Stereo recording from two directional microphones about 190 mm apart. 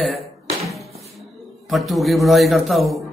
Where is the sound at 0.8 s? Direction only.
35° right (ahead or behind).